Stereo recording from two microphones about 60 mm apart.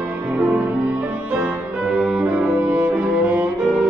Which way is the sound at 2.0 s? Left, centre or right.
Centre.